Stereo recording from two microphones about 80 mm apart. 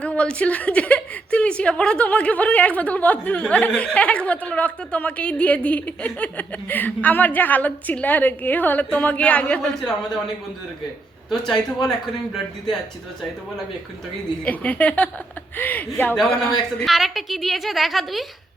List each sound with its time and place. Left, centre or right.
0.0 s a woman's voice: centre
9.6 s a woman's voice: centre
11.3 s a man's voice: centre
14.4 s a woman's voice: centre
16.8 s a man's voice: centre